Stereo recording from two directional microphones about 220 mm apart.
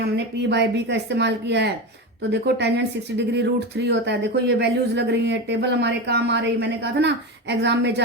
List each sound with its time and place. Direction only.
0.5 s speech: 50° right (ahead or behind)